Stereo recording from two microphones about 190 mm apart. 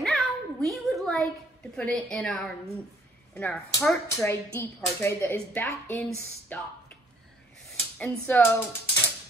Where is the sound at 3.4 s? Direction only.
15° left (ahead or behind).